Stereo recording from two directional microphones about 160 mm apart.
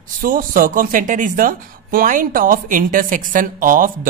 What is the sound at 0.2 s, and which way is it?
A woman's voice, 60° right (ahead or behind).